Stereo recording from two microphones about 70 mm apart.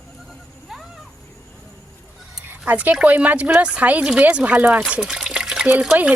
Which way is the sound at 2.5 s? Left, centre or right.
Right.